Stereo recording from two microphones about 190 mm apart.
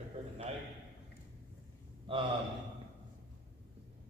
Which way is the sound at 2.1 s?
25° right (ahead or behind).